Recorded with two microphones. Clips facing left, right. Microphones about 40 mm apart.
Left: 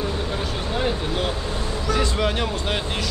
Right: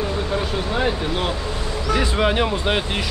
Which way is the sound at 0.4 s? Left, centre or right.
Centre.